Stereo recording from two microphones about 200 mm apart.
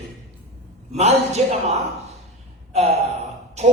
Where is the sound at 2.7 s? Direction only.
30° right (ahead or behind).